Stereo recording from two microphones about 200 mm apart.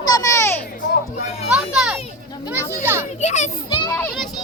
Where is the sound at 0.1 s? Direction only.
15° left (ahead or behind).